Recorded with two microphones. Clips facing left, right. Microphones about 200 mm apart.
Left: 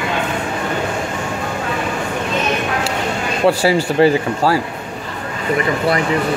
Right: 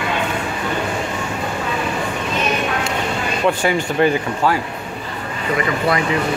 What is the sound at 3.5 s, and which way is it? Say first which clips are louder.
Speech: left 4 dB; 35° left (ahead or behind).